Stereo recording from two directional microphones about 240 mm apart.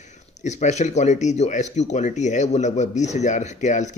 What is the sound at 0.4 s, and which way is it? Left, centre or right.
Speech, left.